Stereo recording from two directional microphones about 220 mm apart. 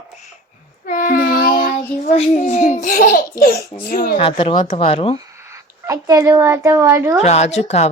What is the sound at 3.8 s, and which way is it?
Speech, 45° left (ahead or behind).